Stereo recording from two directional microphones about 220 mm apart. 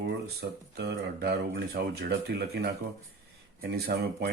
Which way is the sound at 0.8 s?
50° right (ahead or behind).